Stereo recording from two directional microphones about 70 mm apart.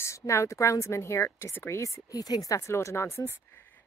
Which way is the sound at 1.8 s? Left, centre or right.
Left.